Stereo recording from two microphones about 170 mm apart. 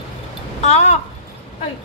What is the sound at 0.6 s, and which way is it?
Speech, 40° left (ahead or behind).